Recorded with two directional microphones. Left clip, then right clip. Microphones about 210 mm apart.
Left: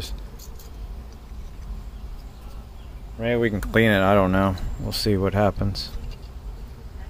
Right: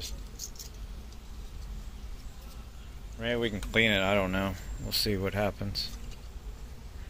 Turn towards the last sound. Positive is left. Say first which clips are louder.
# left 9 dB
turn(degrees=20)  # may be behind; listen again after turning